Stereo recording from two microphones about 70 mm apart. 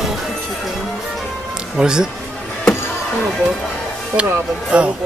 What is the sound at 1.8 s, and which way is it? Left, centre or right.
Speech, centre.